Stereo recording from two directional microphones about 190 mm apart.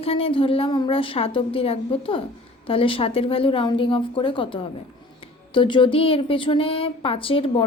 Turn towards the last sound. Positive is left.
turn(degrees=30)  # may be behind; listen again after turning